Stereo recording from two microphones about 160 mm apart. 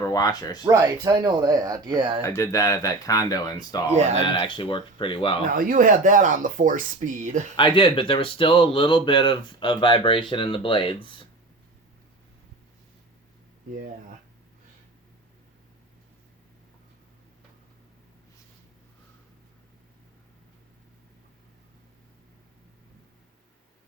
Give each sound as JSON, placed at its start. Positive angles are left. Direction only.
{"t": 0.1, "sound": "speech", "side_deg": 25}
{"t": 0.7, "sound": "speech", "side_deg": -20}
{"t": 2.2, "sound": "speech", "side_deg": 20}
{"t": 3.9, "sound": "speech", "side_deg": -45}
{"t": 4.2, "sound": "speech", "side_deg": 30}
{"t": 5.5, "sound": "speech", "side_deg": -60}
{"t": 7.5, "sound": "speech", "side_deg": 30}